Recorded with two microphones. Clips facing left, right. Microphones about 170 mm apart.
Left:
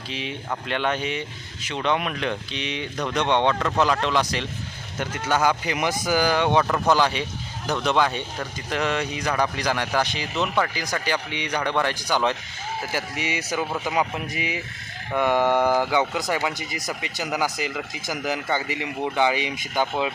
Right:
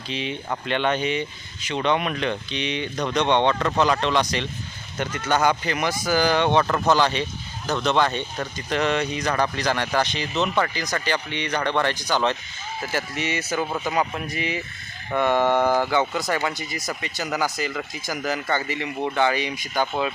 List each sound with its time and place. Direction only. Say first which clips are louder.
0.1 s speech: right 2 dB; centre (ahead or behind)
5.7 s speech: even; 15° left (ahead or behind)